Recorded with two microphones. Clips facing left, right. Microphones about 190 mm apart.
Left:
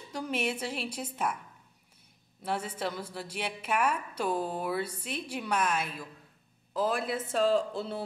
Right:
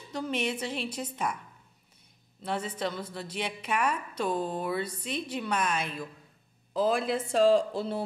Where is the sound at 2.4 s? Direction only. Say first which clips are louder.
Right 1 dB; 10° left (ahead or behind).